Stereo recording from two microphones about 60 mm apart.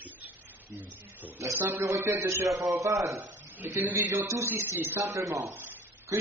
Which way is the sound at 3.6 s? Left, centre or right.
Right.